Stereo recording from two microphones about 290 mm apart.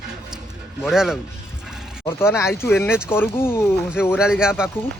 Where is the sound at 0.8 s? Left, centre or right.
Centre.